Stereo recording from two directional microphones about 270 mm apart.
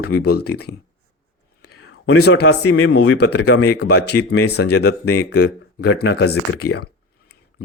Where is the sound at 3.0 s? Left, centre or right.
Left.